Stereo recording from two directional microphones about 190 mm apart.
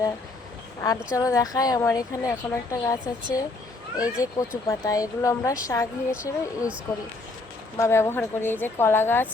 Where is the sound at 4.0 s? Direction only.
20° left (ahead or behind).